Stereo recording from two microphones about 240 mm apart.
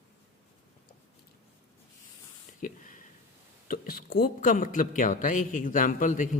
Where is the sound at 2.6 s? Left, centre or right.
Left.